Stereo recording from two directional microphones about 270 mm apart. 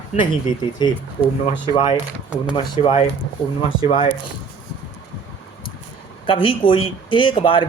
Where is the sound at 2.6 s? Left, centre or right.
Centre.